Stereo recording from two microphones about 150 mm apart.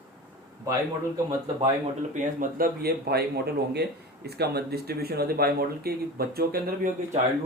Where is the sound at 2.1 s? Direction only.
70° right (ahead or behind); by 6.9 s 85° right.